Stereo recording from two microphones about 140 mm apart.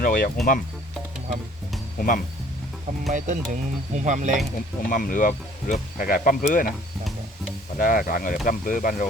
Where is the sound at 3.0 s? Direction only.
60° right (ahead or behind).